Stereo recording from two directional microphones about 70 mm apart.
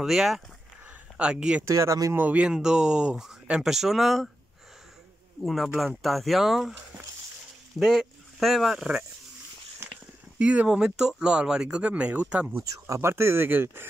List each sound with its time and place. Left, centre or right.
0.0 s speech: centre
1.6 s speech: right
2.1 s speech: right; by 4.3 s centre
5.4 s speech: centre
9.8 s a sound: right
10.4 s speech: centre
12.5 s speech: right